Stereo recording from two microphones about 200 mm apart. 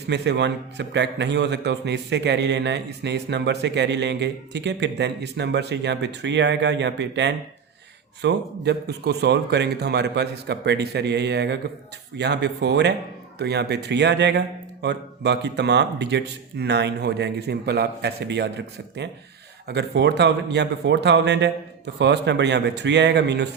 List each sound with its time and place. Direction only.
0.1 s a man's voice: 60° right (ahead or behind)